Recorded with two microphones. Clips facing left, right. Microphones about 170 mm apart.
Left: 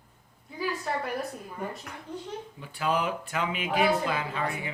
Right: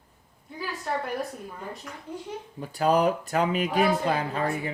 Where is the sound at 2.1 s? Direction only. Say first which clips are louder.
Right 1 dB; 10° right (ahead or behind).